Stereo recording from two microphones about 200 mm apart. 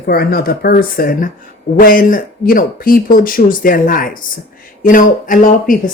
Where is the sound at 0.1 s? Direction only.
50° left (ahead or behind).